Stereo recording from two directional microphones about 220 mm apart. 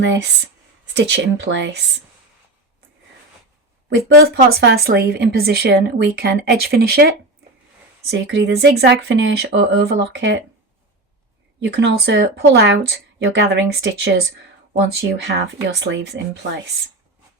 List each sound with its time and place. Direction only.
0.0 s speech: 55° right (ahead or behind)
3.8 s speech: 45° right (ahead or behind)
8.1 s speech: 50° right (ahead or behind)
11.6 s speech: 55° right (ahead or behind)
15.4 s speech: 50° right (ahead or behind)